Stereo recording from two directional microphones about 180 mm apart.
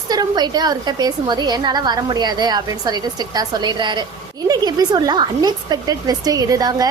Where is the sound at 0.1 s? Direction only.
20° right (ahead or behind).